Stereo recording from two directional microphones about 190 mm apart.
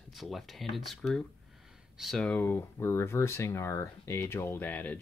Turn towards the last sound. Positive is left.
turn(degrees=10)  # may be behind; listen again after turning